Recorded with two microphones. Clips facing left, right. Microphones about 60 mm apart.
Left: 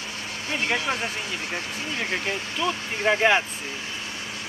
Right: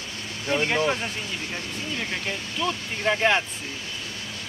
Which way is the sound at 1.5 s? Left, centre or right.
Centre.